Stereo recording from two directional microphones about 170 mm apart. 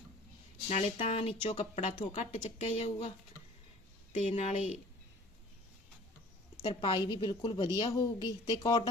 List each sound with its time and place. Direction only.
0.7 s speech: 40° left (ahead or behind)
4.1 s speech: 45° left (ahead or behind)
6.6 s a woman's voice: 25° left (ahead or behind)